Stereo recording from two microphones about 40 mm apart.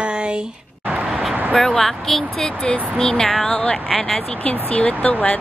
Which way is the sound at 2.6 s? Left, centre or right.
Left.